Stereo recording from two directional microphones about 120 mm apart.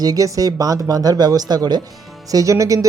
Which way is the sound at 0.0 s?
30° right (ahead or behind).